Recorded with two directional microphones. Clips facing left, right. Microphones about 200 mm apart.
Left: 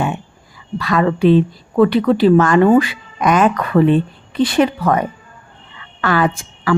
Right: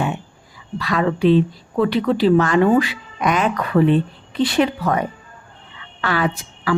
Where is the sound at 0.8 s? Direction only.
50° left (ahead or behind).